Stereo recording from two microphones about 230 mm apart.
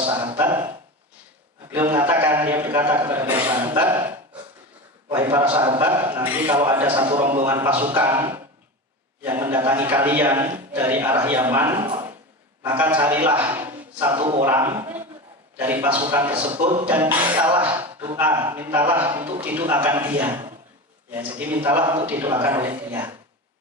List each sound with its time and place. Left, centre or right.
0.4 s speech: centre
1.7 s a man's voice: centre
5.1 s a man's voice: centre
5.4 s a man's voice: right
5.8 s a man's voice: centre
7.4 s a man's voice: centre
11.8 s a sound: centre
12.6 s a man's voice: centre
21.4 s a man's voice: centre